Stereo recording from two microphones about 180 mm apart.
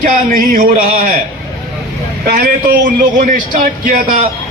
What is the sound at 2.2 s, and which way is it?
A man's voice, 55° right (ahead or behind).